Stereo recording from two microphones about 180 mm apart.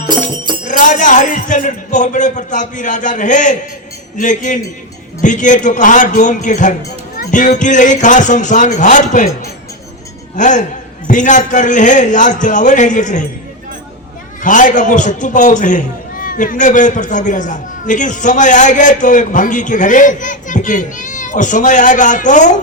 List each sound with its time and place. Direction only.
0.6 s a man's voice: 45° left (ahead or behind)
10.3 s a man's voice: 45° left (ahead or behind)
14.4 s a man's voice: 45° left (ahead or behind)